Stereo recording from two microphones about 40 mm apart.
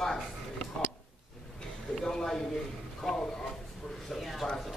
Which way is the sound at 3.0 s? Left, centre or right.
Centre.